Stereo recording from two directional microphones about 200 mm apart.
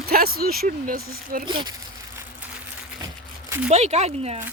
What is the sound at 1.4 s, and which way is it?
Speech, 25° right (ahead or behind).